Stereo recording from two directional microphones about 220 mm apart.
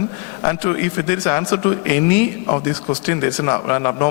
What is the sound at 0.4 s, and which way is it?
A man's voice, 15° left (ahead or behind).